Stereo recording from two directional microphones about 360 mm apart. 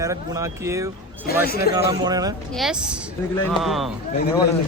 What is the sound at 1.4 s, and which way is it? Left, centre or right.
Speech, left.